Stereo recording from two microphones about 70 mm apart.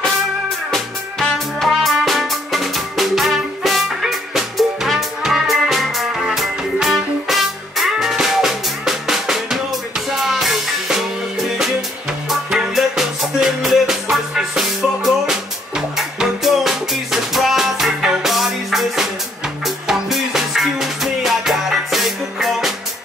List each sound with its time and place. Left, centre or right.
0.7 s music: centre